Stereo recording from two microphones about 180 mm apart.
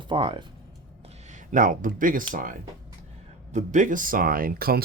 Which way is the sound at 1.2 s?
45° right (ahead or behind).